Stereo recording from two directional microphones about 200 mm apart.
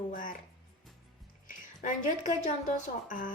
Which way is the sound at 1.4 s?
40° left (ahead or behind).